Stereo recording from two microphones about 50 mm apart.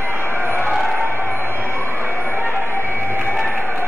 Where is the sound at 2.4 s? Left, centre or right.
Left.